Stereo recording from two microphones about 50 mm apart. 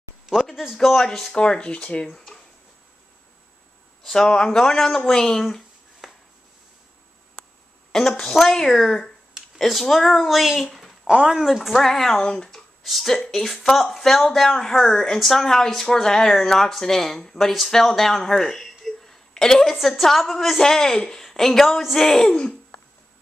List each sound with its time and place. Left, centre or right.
0.3 s speech: centre
0.7 s speech: centre
1.3 s speech: centre
4.0 s speech: centre
8.1 s a woman's voice: centre
11.1 s speech: centre
11.4 s speech: centre
12.4 s a sound: centre
13.3 s speech: centre
18.9 s a sound: centre
20.0 s speech: centre